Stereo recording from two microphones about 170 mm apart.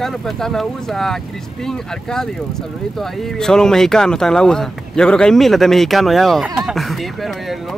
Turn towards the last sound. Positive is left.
turn(degrees=0)  # may be behind; listen again after turning